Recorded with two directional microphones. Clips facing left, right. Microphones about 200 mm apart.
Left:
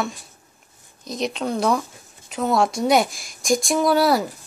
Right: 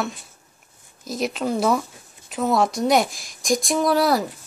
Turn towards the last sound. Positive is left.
turn(degrees=0)  # may be behind; listen again after turning